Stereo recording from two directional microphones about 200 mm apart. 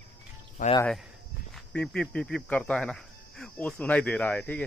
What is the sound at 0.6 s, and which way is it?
Speech, 40° left (ahead or behind).